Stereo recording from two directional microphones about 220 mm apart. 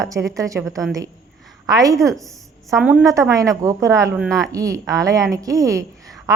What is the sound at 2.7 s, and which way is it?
A woman's voice, 5° right (ahead or behind).